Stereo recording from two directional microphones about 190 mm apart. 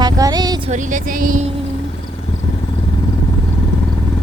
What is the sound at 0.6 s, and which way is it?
Speech, 40° right (ahead or behind).